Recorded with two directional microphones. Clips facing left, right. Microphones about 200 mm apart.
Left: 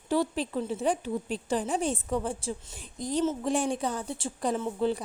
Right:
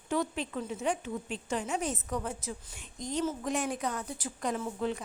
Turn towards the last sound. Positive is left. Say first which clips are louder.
# left 5 dB
turn(degrees=30)  # may be behind; listen again after turning